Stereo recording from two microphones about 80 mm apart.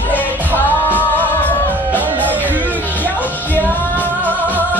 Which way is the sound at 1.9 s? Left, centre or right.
Right.